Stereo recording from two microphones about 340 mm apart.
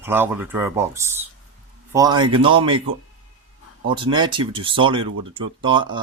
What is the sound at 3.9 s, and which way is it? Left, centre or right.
Speech, centre.